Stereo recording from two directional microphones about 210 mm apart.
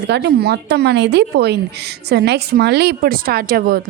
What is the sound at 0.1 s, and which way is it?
Speech, 50° right (ahead or behind).